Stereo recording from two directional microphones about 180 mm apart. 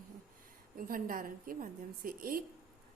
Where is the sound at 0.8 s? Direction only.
50° right (ahead or behind).